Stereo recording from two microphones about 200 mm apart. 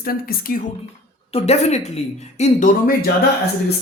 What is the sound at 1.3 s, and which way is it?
A woman's voice, 30° left (ahead or behind).